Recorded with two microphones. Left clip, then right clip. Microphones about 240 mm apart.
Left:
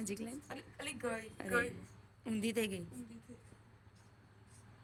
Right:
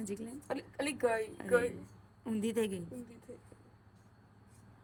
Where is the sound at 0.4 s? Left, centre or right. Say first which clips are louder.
Right 8 dB; right.